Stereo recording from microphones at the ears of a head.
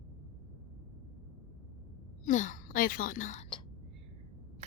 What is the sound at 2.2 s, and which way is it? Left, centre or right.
Speech, left.